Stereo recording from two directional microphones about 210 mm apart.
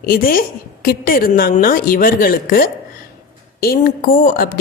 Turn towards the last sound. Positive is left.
turn(degrees=40)  # may be behind; listen again after turning